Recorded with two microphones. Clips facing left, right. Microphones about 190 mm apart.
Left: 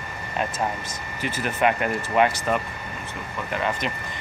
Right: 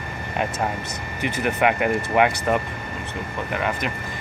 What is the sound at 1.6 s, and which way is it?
Speech, 15° right (ahead or behind).